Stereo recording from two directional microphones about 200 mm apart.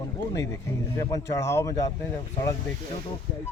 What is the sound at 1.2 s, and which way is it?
Speech, 15° left (ahead or behind).